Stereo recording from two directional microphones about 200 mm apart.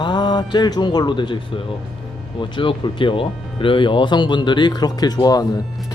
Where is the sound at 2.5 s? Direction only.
25° left (ahead or behind).